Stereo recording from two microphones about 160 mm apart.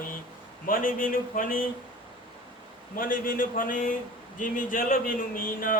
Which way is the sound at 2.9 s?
60° left (ahead or behind).